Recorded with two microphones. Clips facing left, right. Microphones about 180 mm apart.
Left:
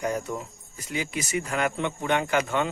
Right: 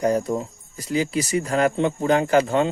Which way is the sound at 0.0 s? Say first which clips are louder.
Right 8 dB; 35° right (ahead or behind).